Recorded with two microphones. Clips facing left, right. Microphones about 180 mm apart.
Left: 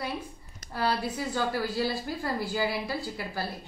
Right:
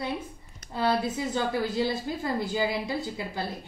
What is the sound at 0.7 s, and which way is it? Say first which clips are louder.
A woman's voice: right 3 dB; 20° right (ahead or behind).